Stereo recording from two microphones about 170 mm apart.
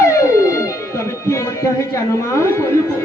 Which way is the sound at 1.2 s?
15° left (ahead or behind).